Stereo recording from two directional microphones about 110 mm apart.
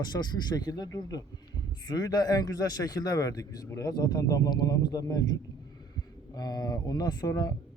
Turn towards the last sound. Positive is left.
turn(degrees=35)  # may be behind; listen again after turning